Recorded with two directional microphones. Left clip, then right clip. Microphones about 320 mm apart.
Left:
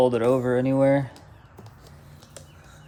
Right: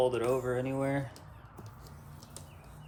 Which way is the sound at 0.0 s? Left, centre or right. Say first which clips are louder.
Left 9 dB; left.